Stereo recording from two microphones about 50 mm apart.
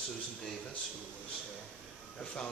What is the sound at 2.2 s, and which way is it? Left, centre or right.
Speech, left.